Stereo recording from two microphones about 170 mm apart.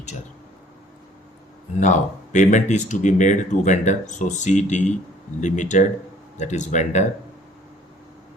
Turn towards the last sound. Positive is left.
turn(degrees=45)  # may be behind; listen again after turning